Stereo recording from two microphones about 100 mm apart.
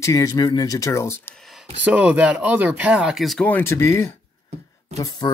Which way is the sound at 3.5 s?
25° left (ahead or behind).